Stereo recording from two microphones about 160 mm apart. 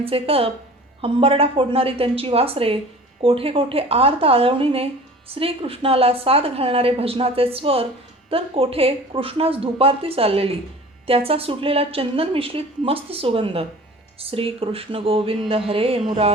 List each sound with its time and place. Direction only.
0.0 s a woman's voice: 35° right (ahead or behind)